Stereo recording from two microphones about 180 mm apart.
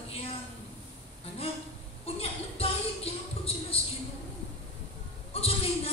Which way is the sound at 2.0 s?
35° left (ahead or behind).